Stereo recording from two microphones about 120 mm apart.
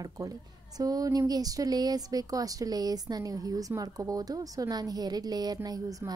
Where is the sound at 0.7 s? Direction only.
30° right (ahead or behind).